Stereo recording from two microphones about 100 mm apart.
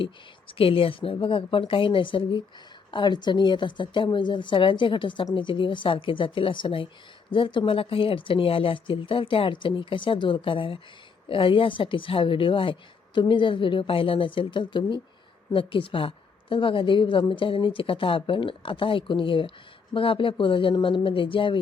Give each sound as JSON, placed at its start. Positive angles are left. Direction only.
{"t": 0.0, "sound": "a woman's voice", "side_deg": 65}